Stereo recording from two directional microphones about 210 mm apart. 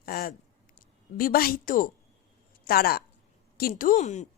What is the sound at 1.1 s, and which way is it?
A woman's voice, 45° left (ahead or behind).